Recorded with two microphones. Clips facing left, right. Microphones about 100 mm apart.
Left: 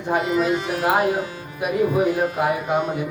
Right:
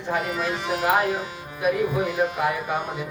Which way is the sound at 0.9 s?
15° left (ahead or behind).